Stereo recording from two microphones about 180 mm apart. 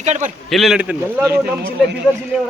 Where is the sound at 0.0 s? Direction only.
40° right (ahead or behind).